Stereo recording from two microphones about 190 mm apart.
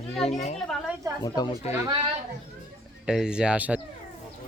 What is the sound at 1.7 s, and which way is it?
Speech, 35° left (ahead or behind).